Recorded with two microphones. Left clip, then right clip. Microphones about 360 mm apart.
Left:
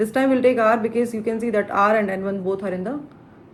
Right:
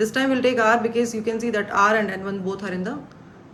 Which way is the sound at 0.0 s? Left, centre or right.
Centre.